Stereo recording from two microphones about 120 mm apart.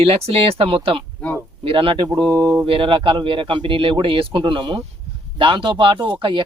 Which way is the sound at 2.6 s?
45° right (ahead or behind).